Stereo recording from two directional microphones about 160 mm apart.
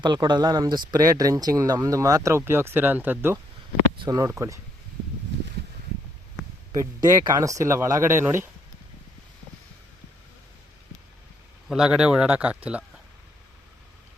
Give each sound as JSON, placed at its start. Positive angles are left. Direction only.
{"t": 0.0, "sound": "speech", "side_deg": -30}
{"t": 4.0, "sound": "speech", "side_deg": -25}
{"t": 6.7, "sound": "speech", "side_deg": -20}
{"t": 11.7, "sound": "speech", "side_deg": -5}